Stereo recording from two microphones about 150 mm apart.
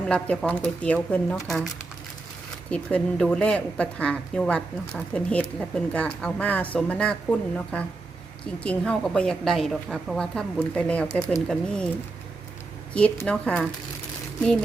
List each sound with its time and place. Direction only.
0.1 s a woman's voice: 5° left (ahead or behind)
12.9 s speech: 10° left (ahead or behind)